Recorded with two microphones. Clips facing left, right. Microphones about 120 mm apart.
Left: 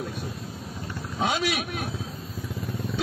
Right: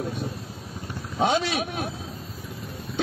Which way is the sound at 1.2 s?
25° right (ahead or behind).